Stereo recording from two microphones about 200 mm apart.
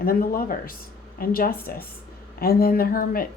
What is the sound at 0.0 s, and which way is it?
Speech, 45° left (ahead or behind).